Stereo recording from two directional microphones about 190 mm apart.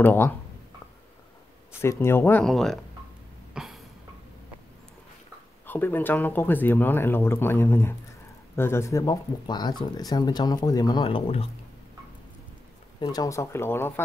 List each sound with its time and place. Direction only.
0.0 s speech: 10° left (ahead or behind)
1.8 s speech: 15° left (ahead or behind)
3.5 s cough: centre (ahead or behind)
5.7 s speech: 10° left (ahead or behind); by 11.4 s 30° left (ahead or behind)
13.0 s speech: 20° left (ahead or behind)